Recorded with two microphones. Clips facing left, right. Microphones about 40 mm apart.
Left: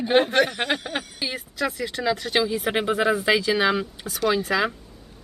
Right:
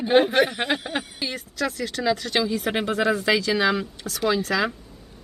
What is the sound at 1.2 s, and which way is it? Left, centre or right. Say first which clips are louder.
Speech: left 3 dB; centre.